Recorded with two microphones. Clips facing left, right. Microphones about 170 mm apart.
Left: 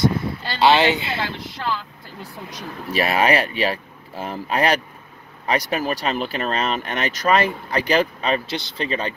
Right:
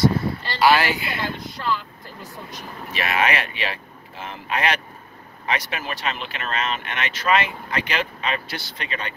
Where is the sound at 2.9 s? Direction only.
35° left (ahead or behind).